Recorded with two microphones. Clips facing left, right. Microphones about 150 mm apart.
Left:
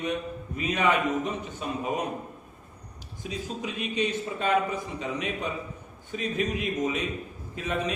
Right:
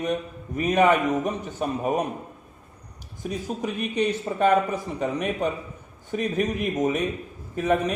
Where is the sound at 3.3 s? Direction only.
55° right (ahead or behind).